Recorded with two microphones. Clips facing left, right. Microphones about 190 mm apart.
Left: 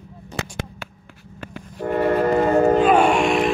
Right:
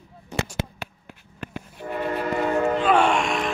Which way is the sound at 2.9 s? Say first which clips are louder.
Left 4 dB; 10° left (ahead or behind).